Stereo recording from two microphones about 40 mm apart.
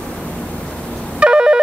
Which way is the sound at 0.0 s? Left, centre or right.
Centre.